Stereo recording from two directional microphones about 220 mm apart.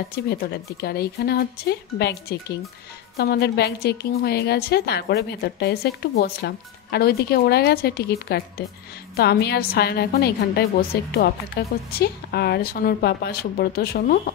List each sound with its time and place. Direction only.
0.1 s a woman's voice: 45° left (ahead or behind)